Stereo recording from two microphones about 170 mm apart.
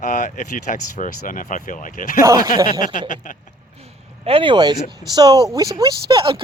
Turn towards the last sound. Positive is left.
turn(degrees=-30)  # may be behind; listen again after turning